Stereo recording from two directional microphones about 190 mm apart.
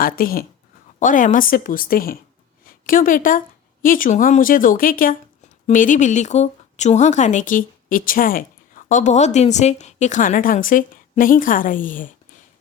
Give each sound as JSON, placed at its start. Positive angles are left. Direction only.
{"t": 0.0, "sound": "a woman's voice", "side_deg": 50}